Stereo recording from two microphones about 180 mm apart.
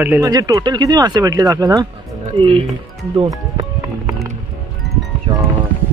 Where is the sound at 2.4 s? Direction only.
30° right (ahead or behind).